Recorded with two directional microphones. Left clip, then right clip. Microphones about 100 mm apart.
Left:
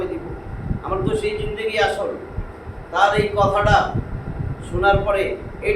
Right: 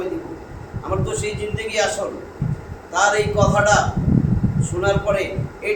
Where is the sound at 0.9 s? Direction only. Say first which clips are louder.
Left 2 dB; 15° left (ahead or behind).